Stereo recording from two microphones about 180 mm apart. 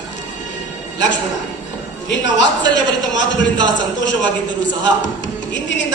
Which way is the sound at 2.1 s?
90° left.